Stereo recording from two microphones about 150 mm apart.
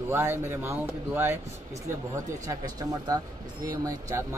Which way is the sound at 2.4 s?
25° right (ahead or behind).